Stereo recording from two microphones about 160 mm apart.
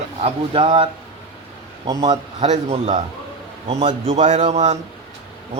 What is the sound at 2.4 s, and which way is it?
A man's voice, 40° right (ahead or behind).